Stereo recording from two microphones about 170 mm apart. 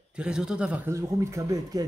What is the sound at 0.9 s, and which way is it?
Speech, 15° right (ahead or behind).